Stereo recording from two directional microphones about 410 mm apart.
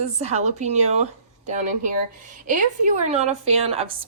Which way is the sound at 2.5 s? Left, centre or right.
Centre.